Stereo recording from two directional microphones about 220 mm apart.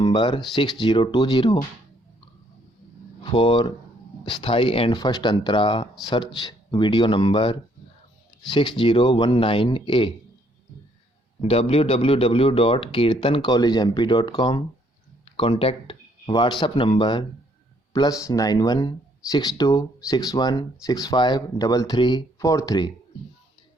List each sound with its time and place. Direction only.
0.0 s a man's voice: 20° left (ahead or behind)
3.2 s a man's voice: 20° left (ahead or behind)
11.4 s a man's voice: 25° left (ahead or behind)